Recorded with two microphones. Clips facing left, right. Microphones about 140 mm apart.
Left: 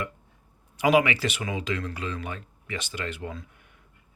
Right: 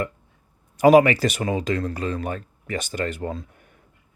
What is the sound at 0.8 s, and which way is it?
Speech, 45° right (ahead or behind).